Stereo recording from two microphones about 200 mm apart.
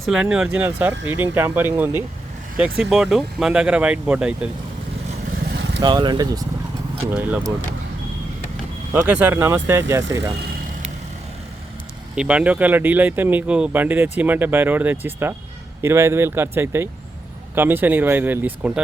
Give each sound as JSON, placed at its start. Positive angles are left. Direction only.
{"t": 0.0, "sound": "speech", "side_deg": -5}
{"t": 5.8, "sound": "speech", "side_deg": -20}
{"t": 7.1, "sound": "speech", "side_deg": -5}
{"t": 8.9, "sound": "speech", "side_deg": -10}
{"t": 12.1, "sound": "speech", "side_deg": -5}